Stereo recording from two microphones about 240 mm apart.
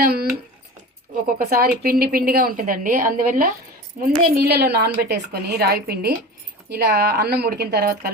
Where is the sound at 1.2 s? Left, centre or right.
Right.